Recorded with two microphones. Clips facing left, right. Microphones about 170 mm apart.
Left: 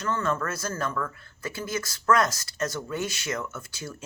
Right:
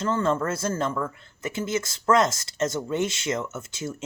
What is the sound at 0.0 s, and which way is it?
Speech, 25° right (ahead or behind).